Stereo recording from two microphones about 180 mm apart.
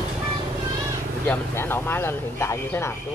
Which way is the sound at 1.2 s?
10° left (ahead or behind).